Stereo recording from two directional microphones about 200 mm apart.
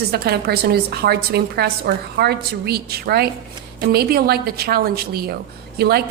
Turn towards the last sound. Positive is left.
turn(degrees=-50)  # may be behind; listen again after turning